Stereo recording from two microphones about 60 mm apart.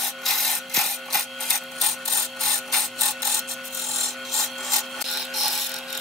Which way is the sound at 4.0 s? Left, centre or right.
Centre.